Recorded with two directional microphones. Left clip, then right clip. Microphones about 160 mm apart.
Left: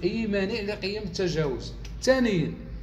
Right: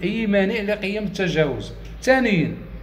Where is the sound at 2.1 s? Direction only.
50° left (ahead or behind).